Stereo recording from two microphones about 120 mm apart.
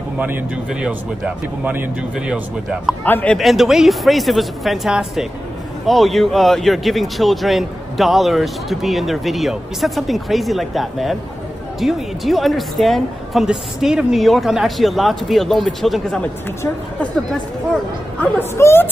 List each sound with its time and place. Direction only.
0.2 s a man's voice: 10° right (ahead or behind)
3.1 s a man's voice: 15° left (ahead or behind)
3.3 s speech: centre (ahead or behind)
18.2 s speech: 20° left (ahead or behind)